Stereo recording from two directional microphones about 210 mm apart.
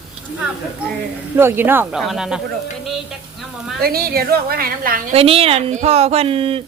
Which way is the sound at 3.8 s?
45° right (ahead or behind).